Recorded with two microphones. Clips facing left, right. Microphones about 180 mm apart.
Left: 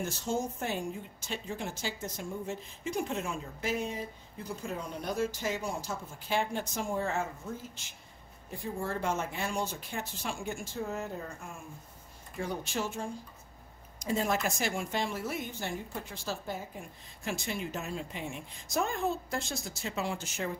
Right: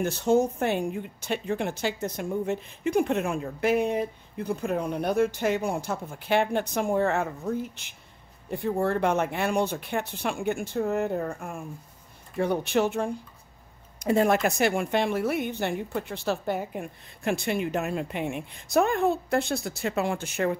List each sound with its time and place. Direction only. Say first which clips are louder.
0.0 s speech: right 10 dB; 60° right (ahead or behind)